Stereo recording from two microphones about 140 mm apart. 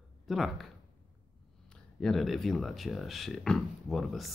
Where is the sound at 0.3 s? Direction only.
Centre (ahead or behind).